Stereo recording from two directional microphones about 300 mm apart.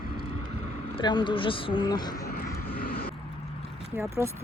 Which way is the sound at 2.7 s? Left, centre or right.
Left.